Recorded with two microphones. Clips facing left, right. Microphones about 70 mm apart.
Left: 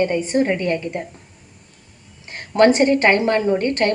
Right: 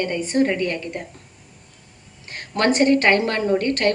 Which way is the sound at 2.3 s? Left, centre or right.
Left.